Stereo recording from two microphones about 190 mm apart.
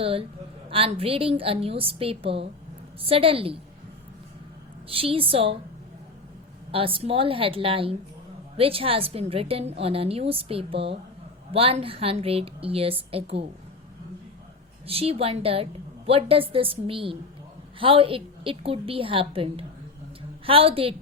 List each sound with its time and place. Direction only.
0.0 s a woman's voice: 30° right (ahead or behind)
4.9 s a woman's voice: 30° right (ahead or behind)
6.7 s a woman's voice: 30° right (ahead or behind)
14.8 s a woman's voice: 30° right (ahead or behind)